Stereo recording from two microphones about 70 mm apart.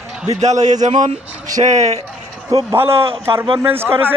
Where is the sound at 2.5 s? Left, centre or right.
Right.